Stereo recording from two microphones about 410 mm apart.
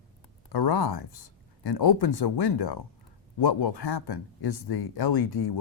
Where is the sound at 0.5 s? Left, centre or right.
Left.